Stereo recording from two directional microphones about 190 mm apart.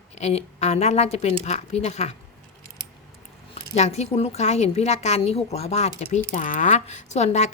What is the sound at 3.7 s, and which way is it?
A woman's voice, 35° left (ahead or behind).